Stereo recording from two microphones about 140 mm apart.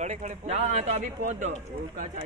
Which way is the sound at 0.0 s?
55° right (ahead or behind).